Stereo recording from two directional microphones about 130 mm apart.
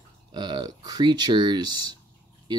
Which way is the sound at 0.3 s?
35° right (ahead or behind).